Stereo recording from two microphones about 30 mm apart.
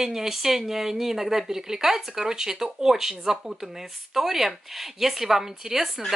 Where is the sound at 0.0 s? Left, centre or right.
Centre.